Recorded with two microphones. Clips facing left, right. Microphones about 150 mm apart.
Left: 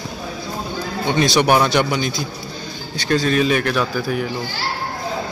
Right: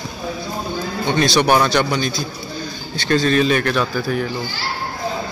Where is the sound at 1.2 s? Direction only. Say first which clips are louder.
Even; 15° left (ahead or behind).